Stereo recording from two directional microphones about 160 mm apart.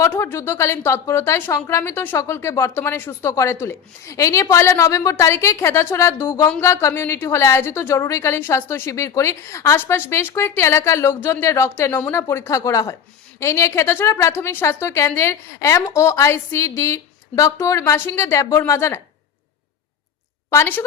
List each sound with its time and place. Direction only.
0.0 s a woman's voice: 15° left (ahead or behind)
20.5 s a woman's voice: 15° left (ahead or behind)